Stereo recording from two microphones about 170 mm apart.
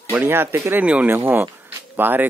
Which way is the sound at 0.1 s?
10° right (ahead or behind).